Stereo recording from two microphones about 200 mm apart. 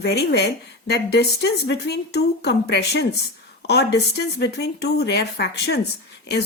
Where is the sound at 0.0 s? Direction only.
55° left (ahead or behind).